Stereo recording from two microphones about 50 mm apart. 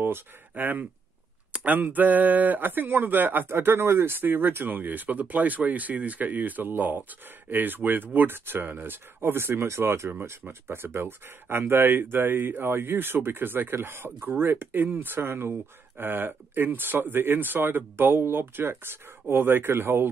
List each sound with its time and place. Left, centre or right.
0.0 s speech: right
14.8 s speech: right